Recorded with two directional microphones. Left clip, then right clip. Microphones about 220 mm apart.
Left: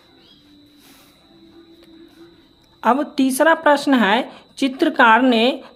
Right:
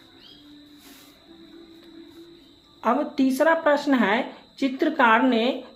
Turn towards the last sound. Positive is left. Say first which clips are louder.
# left 6 dB
turn(degrees=40)  # may be behind; listen again after turning